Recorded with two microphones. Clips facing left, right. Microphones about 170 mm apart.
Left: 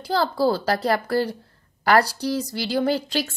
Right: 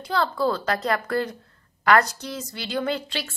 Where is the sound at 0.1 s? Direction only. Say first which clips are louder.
Left 3 dB; 35° left (ahead or behind).